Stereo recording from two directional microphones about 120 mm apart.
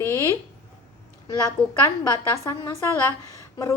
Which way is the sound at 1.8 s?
30° left (ahead or behind).